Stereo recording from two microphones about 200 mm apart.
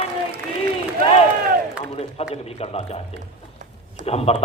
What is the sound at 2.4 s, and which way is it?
Speech, 30° left (ahead or behind).